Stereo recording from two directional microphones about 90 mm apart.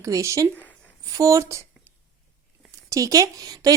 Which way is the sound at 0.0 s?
35° right (ahead or behind).